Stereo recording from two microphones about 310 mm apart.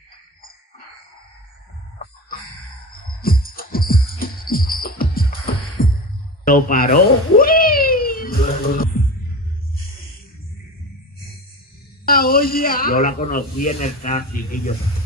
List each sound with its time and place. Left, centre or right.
3.2 s music: left
6.4 s a sound: left
12.1 s speech: left